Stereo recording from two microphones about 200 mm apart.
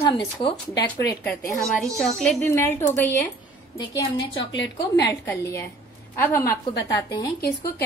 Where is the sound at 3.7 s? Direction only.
25° left (ahead or behind).